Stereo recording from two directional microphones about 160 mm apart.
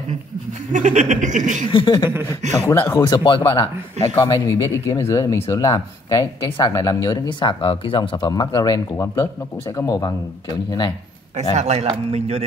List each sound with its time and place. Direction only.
0.7 s chuckle: 50° right (ahead or behind)
1.7 s speech: 30° left (ahead or behind)
2.5 s speech: 15° left (ahead or behind)
3.3 s speech: 30° left (ahead or behind)
11.5 s chuckle: 40° right (ahead or behind)
11.9 s a man's voice: 40° right (ahead or behind)